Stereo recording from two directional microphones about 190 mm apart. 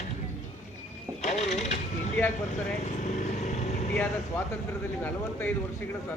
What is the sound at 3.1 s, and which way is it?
Vehicle, 40° left (ahead or behind).